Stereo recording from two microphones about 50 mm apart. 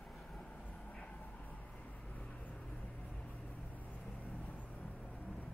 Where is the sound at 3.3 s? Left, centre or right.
Left.